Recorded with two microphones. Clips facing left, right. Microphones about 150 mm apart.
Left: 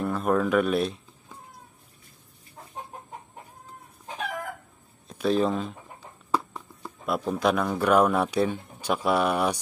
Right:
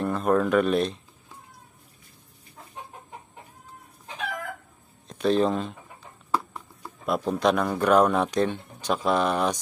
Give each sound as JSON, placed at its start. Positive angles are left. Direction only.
{"t": 0.0, "sound": "speech", "side_deg": 5}
{"t": 5.0, "sound": "speech", "side_deg": 5}